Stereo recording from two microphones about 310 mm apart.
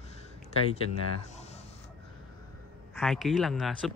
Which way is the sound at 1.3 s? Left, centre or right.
Left.